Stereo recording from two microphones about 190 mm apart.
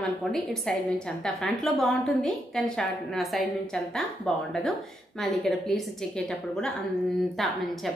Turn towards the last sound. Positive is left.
turn(degrees=0)  # may be behind; listen again after turning